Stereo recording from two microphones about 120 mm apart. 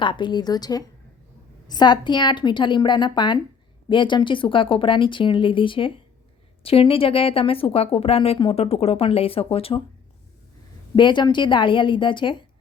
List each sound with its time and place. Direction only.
0.0 s a woman's voice: 40° left (ahead or behind)
10.9 s a woman's voice: 40° left (ahead or behind)